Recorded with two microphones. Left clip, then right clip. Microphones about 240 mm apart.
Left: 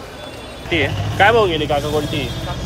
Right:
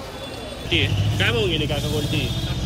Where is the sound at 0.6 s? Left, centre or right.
Centre.